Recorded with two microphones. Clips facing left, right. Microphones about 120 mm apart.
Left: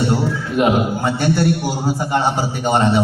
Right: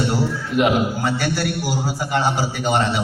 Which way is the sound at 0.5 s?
25° left (ahead or behind).